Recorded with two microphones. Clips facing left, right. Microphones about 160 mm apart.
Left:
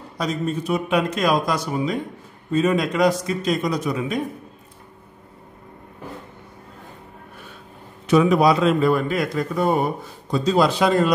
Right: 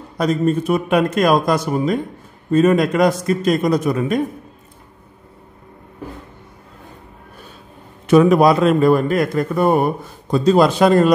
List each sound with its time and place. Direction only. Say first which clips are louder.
0.2 s a man's voice: right 7 dB; 55° right (ahead or behind)
8.1 s a man's voice: right 4 dB; 50° right (ahead or behind)